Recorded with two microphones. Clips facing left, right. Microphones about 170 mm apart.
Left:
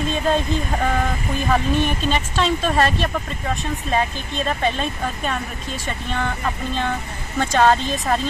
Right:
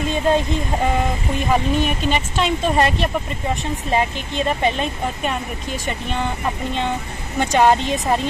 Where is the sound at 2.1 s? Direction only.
15° right (ahead or behind).